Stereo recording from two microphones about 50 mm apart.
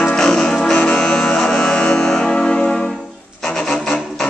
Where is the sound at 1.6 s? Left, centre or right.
Left.